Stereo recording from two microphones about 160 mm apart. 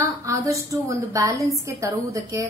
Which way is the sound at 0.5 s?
20° right (ahead or behind).